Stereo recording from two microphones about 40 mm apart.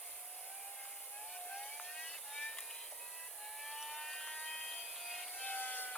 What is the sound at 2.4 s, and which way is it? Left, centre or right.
Music, centre.